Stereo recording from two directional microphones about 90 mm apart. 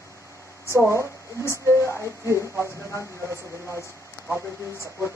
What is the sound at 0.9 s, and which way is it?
A woman's voice, 30° right (ahead or behind).